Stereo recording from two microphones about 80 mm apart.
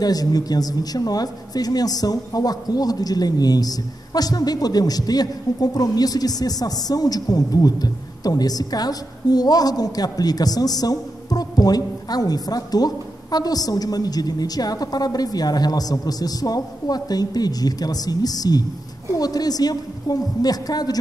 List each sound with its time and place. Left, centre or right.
0.0 s speech: left